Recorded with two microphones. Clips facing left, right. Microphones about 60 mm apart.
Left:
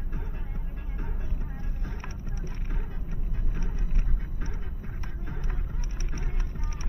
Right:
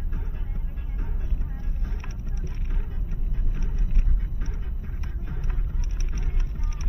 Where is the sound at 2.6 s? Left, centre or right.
Left.